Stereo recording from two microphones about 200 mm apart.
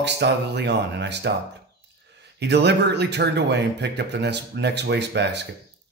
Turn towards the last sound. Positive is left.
turn(degrees=-60)  # may be behind; listen again after turning